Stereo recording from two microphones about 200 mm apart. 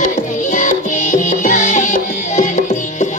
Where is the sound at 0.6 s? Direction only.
40° left (ahead or behind).